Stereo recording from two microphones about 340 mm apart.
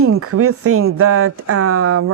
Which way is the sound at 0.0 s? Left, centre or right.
Right.